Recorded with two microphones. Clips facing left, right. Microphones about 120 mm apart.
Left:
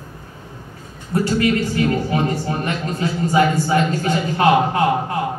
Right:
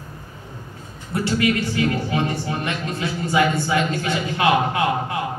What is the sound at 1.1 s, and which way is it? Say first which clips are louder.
A man's voice: left 3 dB; 35° left (ahead or behind).